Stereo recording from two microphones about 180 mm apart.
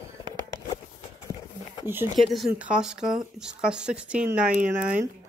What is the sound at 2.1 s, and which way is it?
Speech, centre (ahead or behind).